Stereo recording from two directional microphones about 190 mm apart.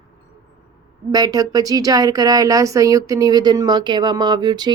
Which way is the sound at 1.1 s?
20° right (ahead or behind).